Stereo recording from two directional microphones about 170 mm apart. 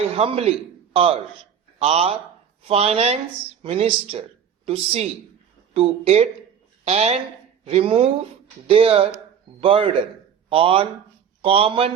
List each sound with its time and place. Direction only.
0.2 s speech: 35° right (ahead or behind)